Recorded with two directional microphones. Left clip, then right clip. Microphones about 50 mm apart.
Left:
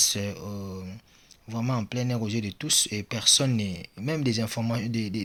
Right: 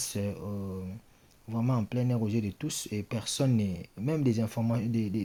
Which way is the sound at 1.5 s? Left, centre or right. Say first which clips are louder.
Left 2 dB; right.